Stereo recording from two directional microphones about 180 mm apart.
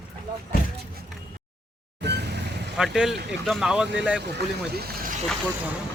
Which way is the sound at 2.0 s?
70° right (ahead or behind).